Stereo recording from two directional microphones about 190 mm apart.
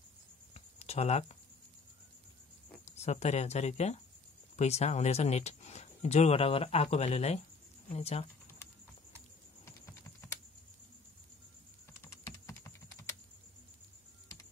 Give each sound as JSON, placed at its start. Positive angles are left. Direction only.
{"t": 0.6, "sound": "a sound", "side_deg": 35}
{"t": 2.8, "sound": "speech", "side_deg": 35}
{"t": 9.7, "sound": "typing", "side_deg": 15}
{"t": 12.0, "sound": "typing", "side_deg": 15}